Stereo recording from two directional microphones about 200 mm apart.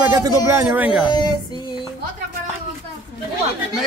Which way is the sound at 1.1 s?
20° left (ahead or behind).